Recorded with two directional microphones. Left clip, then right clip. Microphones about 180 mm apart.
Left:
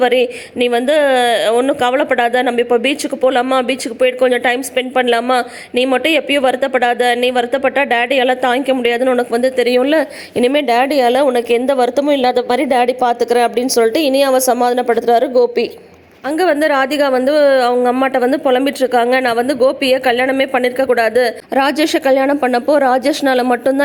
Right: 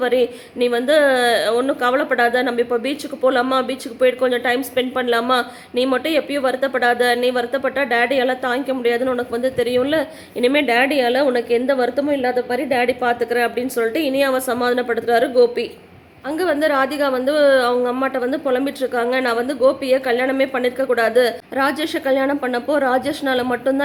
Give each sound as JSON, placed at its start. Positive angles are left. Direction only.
{"t": 0.0, "sound": "speech", "side_deg": 30}
{"t": 16.3, "sound": "speech", "side_deg": 40}